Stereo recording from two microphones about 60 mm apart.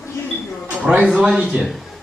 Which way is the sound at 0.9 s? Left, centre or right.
Centre.